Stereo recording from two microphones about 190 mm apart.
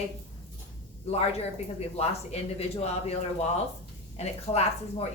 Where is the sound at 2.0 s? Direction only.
35° left (ahead or behind).